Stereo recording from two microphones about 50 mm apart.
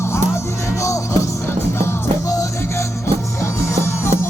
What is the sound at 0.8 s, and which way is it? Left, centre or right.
Music, left.